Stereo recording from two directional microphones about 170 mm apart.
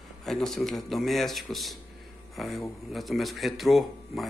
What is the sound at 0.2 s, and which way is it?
A man's voice, centre (ahead or behind).